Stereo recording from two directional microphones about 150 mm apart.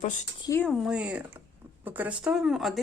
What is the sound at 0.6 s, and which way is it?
Speech, 5° right (ahead or behind).